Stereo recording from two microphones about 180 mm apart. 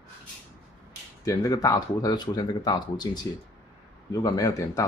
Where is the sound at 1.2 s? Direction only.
20° left (ahead or behind).